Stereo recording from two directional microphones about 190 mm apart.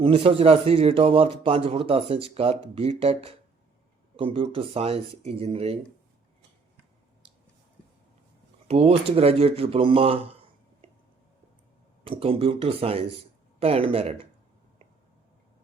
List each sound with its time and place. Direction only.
0.0 s a man's voice: 30° right (ahead or behind)
8.6 s a man's voice: 30° right (ahead or behind)
12.0 s a man's voice: 30° right (ahead or behind)